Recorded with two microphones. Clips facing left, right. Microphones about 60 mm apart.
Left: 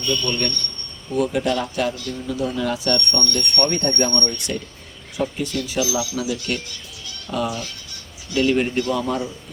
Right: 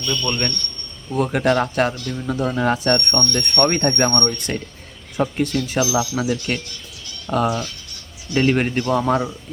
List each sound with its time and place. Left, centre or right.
0.1 s a man's voice: right
1.1 s a man's voice: right